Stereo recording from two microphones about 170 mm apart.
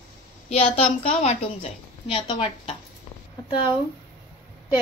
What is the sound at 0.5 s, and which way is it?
A woman's voice, 35° left (ahead or behind).